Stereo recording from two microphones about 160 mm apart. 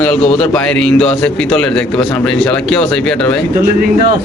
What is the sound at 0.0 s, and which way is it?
A man's voice, 5° left (ahead or behind).